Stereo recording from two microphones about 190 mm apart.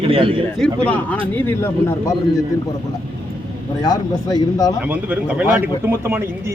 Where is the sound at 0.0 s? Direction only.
30° right (ahead or behind).